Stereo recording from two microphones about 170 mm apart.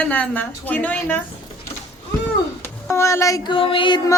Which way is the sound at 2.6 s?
15° left (ahead or behind).